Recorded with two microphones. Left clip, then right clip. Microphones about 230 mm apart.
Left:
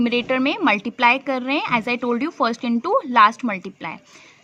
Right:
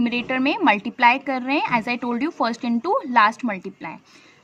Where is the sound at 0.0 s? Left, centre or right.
Centre.